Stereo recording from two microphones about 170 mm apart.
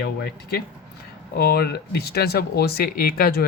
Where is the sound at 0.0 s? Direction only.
75° left (ahead or behind).